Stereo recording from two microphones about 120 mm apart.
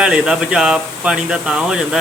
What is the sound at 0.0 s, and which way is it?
Speech, 5° right (ahead or behind).